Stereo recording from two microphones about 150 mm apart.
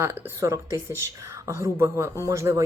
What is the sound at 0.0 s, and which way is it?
A woman's voice, 20° right (ahead or behind).